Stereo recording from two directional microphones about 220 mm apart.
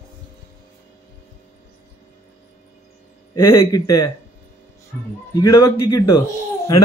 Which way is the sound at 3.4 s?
10° left (ahead or behind).